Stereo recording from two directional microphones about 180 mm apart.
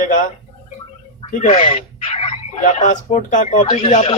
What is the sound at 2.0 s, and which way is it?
Speech, 35° left (ahead or behind).